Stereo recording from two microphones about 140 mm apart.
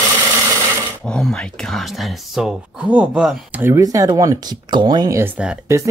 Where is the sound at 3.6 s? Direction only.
20° right (ahead or behind).